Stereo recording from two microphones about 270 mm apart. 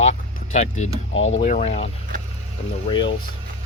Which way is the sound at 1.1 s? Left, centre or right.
Left.